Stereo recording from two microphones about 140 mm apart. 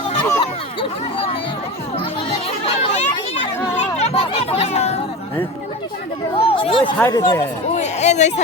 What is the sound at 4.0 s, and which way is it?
Speech, 45° left (ahead or behind).